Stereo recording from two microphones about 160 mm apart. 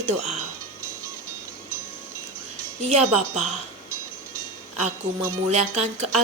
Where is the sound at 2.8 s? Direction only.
45° right (ahead or behind).